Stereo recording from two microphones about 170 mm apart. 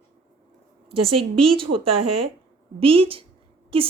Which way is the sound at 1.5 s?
30° right (ahead or behind).